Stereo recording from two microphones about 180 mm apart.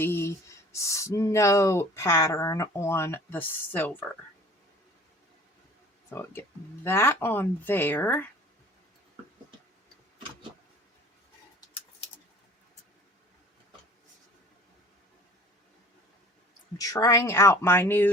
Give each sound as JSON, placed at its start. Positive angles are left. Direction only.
{"t": 0.0, "sound": "speech", "side_deg": 15}
{"t": 6.1, "sound": "speech", "side_deg": 10}
{"t": 16.7, "sound": "speech", "side_deg": 20}